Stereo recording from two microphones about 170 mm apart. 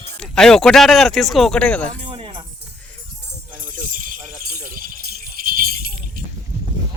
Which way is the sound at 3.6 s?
50° right (ahead or behind).